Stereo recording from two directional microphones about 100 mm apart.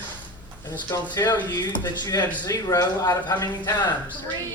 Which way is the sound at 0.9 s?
40° left (ahead or behind).